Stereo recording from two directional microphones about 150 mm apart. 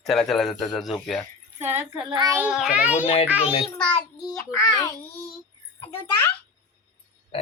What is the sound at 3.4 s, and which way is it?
Speech, 40° left (ahead or behind).